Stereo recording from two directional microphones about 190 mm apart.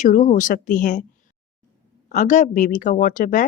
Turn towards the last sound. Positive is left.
turn(degrees=45)  # may be behind; listen again after turning